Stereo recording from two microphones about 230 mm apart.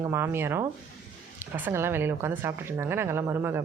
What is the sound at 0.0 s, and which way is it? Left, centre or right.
A woman's voice, centre.